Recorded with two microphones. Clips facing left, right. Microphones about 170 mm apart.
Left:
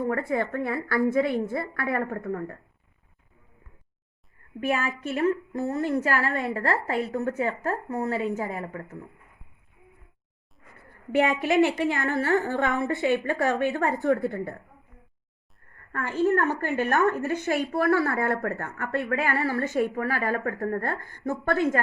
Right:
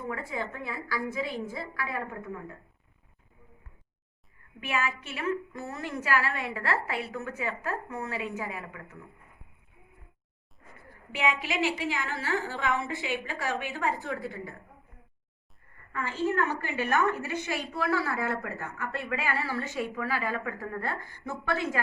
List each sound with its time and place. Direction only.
0.0 s a woman's voice: 55° left (ahead or behind)
4.6 s a woman's voice: 45° left (ahead or behind)
11.1 s a woman's voice: 55° left (ahead or behind)
15.9 s a woman's voice: 55° left (ahead or behind)